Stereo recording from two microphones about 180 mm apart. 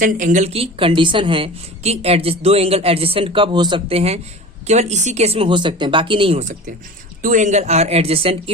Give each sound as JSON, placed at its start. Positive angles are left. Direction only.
{"t": 0.0, "sound": "a woman's voice", "side_deg": -45}
{"t": 7.2, "sound": "a woman's voice", "side_deg": -45}